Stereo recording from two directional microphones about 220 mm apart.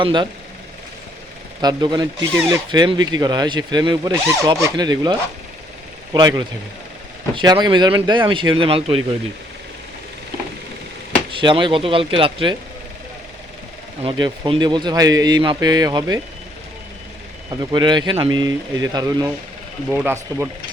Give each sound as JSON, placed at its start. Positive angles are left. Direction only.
{"t": 0.0, "sound": "speech", "side_deg": -20}
{"t": 1.6, "sound": "speech", "side_deg": -20}
{"t": 6.1, "sound": "speech", "side_deg": -20}
{"t": 11.3, "sound": "speech", "side_deg": -25}
{"t": 14.0, "sound": "speech", "side_deg": -20}
{"t": 17.5, "sound": "speech", "side_deg": -20}